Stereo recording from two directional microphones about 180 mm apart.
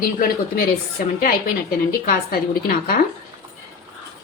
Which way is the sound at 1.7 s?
55° left (ahead or behind).